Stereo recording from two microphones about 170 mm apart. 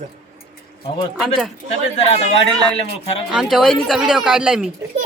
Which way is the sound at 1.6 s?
40° left (ahead or behind).